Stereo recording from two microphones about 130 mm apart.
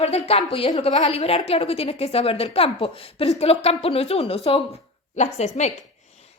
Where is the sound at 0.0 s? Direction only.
55° left (ahead or behind).